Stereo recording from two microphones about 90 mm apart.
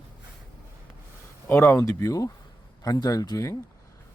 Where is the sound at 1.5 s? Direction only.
25° left (ahead or behind).